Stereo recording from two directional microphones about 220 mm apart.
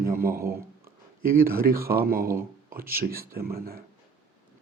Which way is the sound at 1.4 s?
40° right (ahead or behind).